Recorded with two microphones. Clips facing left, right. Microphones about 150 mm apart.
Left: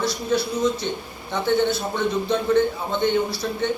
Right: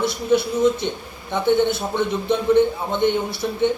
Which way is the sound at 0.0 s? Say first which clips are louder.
Right 4 dB; 20° right (ahead or behind).